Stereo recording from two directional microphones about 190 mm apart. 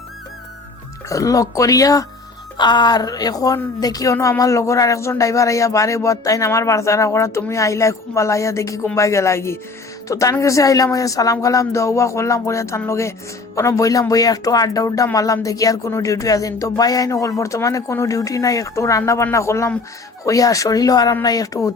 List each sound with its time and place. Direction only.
1.1 s a woman's voice: 15° left (ahead or behind)